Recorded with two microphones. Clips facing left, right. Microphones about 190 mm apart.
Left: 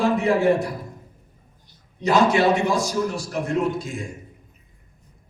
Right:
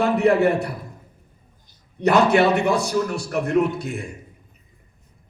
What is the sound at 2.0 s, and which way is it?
A man's voice, 65° right (ahead or behind).